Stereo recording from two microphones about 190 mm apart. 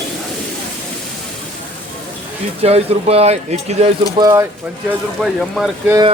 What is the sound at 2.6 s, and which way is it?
Speech, 35° right (ahead or behind).